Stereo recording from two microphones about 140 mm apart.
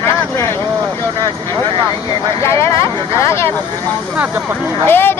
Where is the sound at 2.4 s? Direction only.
20° left (ahead or behind).